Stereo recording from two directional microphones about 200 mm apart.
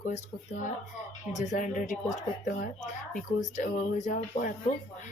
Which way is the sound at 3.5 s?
40° left (ahead or behind).